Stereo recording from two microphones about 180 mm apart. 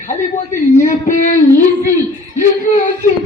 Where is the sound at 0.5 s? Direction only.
45° left (ahead or behind).